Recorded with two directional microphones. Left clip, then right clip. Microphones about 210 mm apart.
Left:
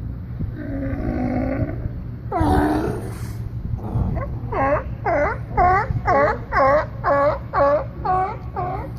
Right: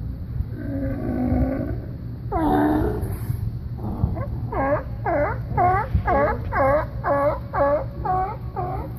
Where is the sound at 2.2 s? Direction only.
25° left (ahead or behind).